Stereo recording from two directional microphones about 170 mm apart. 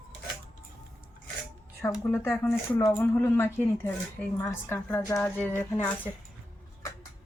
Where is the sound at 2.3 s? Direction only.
10° left (ahead or behind).